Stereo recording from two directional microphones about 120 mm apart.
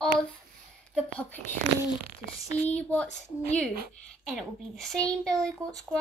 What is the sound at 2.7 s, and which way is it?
Speech, 10° left (ahead or behind).